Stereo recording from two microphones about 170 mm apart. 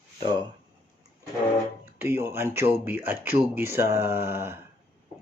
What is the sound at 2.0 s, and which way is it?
Speech, 15° right (ahead or behind).